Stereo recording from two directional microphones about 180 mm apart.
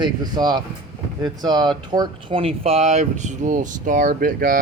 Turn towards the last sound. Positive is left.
turn(degrees=-50)  # may be behind; listen again after turning